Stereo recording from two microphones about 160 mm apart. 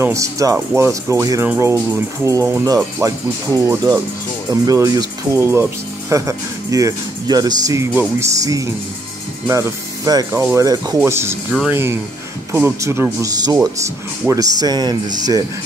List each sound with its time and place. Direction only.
0.0 s speech: 20° right (ahead or behind)